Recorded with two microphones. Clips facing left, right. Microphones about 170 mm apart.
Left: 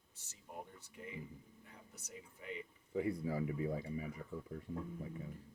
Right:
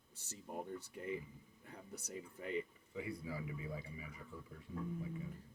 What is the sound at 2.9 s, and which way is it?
Speech, 45° left (ahead or behind).